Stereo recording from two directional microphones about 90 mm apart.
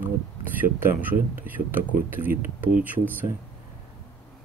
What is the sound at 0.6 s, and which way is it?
Speech, 20° right (ahead or behind).